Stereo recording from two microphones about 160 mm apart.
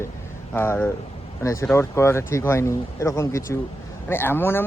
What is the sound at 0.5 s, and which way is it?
Speech, 15° left (ahead or behind).